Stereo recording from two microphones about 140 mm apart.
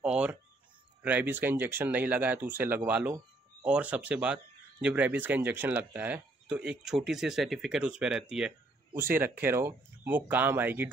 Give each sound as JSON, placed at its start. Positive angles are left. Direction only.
{"t": 0.0, "sound": "speech", "side_deg": -5}
{"t": 8.9, "sound": "speech", "side_deg": -15}